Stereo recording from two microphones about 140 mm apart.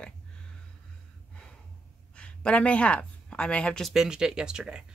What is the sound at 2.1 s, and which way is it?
Speech, 10° left (ahead or behind).